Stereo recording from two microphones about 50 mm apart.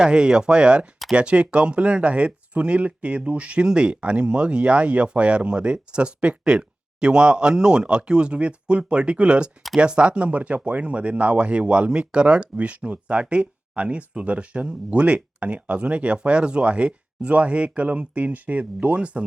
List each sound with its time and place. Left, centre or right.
0.0 s speech: centre